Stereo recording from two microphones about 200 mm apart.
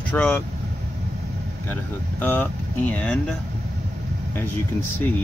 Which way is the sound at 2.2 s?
10° left (ahead or behind).